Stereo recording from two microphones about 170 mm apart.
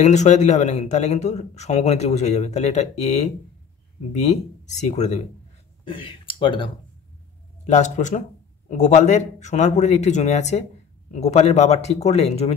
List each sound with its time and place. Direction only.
0.0 s a man's voice: 45° left (ahead or behind)
5.9 s speech: 30° left (ahead or behind)
7.6 s a man's voice: 45° left (ahead or behind)